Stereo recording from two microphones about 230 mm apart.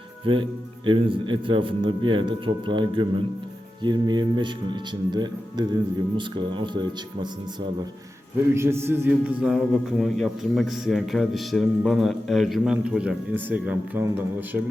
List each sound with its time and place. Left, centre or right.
0.3 s speech: right
8.5 s a man's voice: centre